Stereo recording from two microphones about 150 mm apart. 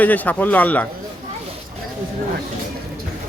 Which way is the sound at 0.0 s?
10° left (ahead or behind).